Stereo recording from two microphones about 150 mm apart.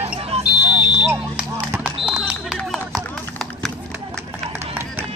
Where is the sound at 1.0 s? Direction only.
10° right (ahead or behind).